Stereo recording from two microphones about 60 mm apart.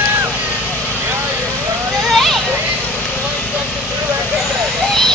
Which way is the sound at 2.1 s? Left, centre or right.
Centre.